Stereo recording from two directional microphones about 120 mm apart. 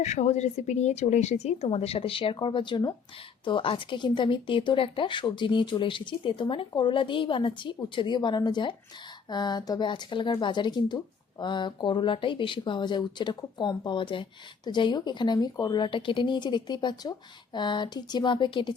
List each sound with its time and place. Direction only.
0.0 s speech: 70° left (ahead or behind); by 18.7 s 40° left (ahead or behind)